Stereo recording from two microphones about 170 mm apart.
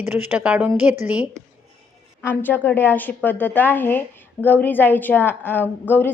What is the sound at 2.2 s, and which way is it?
A woman's voice, 10° left (ahead or behind).